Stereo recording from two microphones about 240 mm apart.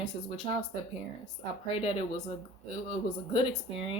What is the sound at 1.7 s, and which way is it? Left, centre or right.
Speech, left.